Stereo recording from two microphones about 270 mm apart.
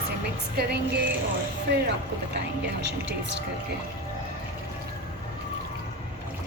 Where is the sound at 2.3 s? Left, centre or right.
Right.